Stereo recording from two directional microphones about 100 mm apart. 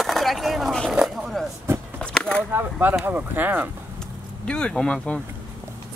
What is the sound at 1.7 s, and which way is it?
Skateboard, 25° right (ahead or behind).